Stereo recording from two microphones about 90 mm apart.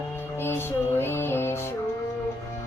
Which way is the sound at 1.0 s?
25° left (ahead or behind).